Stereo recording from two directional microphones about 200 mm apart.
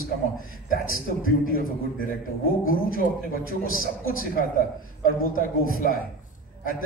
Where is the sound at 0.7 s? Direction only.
45° left (ahead or behind).